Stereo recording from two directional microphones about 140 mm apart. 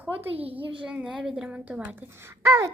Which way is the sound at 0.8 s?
5° right (ahead or behind).